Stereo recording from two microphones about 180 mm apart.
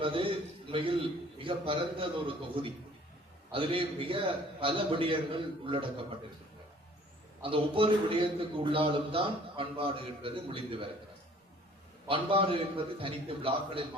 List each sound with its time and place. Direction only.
0.0 s a man's voice: 30° right (ahead or behind)
7.4 s a man's voice: 30° right (ahead or behind)
12.0 s a man's voice: 30° right (ahead or behind)